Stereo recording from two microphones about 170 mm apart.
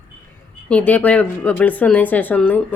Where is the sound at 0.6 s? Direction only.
10° left (ahead or behind).